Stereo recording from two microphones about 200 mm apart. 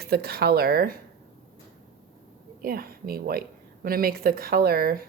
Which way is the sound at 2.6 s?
50° right (ahead or behind).